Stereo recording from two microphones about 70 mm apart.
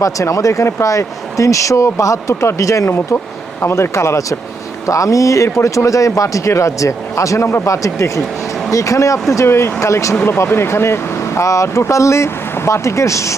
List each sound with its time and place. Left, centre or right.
0.0 s a man's voice: left
10.2 s a man's voice: left